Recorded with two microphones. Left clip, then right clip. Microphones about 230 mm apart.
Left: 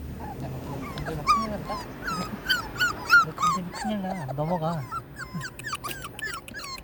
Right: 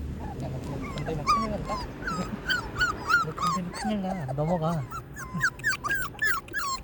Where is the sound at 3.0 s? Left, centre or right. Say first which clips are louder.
Left 8 dB; centre.